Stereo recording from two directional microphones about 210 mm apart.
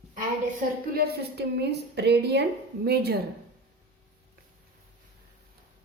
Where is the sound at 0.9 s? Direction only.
50° right (ahead or behind).